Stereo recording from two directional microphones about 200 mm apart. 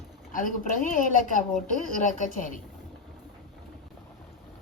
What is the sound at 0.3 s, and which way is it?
A woman's voice, 40° left (ahead or behind).